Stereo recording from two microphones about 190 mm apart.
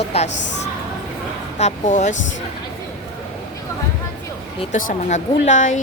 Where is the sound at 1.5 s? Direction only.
35° left (ahead or behind).